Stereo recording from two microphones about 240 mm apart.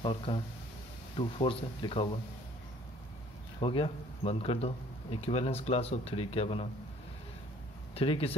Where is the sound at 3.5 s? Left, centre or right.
Left.